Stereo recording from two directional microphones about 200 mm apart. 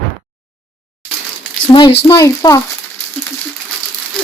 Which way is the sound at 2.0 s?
15° left (ahead or behind).